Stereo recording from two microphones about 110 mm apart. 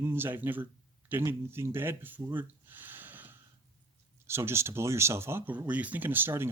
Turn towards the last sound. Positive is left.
turn(degrees=-20)  # may be behind; listen again after turning